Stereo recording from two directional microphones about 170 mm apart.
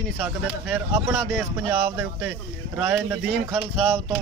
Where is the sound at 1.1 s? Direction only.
Centre (ahead or behind).